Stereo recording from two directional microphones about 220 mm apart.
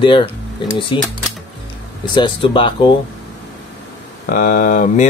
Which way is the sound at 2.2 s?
25° left (ahead or behind).